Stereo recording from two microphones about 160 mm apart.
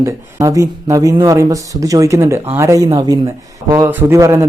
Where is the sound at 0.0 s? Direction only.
20° right (ahead or behind).